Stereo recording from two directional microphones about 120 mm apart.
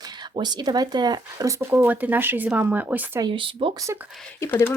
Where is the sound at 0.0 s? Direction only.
35° right (ahead or behind); by 3.2 s 15° right (ahead or behind).